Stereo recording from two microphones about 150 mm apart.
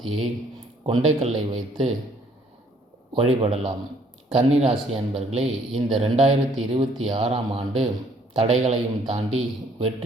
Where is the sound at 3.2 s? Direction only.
40° right (ahead or behind).